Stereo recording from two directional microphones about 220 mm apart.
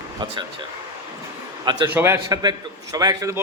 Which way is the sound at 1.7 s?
20° right (ahead or behind).